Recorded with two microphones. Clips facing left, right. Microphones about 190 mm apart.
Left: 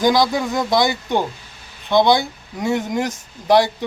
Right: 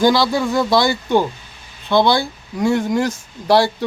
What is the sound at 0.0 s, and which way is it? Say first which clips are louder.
Speech: right 1 dB; 20° left (ahead or behind).